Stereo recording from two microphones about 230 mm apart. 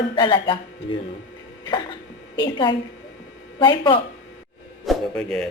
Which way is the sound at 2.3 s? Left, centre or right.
Centre.